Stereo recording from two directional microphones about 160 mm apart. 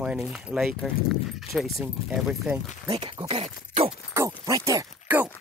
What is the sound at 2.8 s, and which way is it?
Speech, 35° right (ahead or behind).